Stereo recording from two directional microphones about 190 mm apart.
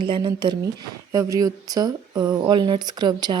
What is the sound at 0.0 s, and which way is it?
Speech, 25° right (ahead or behind).